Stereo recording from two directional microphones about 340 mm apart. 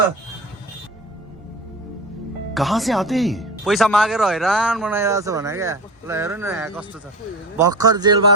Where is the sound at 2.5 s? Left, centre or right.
Centre.